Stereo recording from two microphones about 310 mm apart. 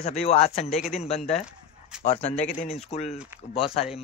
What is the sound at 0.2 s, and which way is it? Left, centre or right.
Speech, centre.